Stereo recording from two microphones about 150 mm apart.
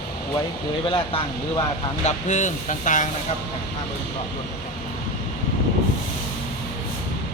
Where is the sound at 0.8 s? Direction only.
35° left (ahead or behind).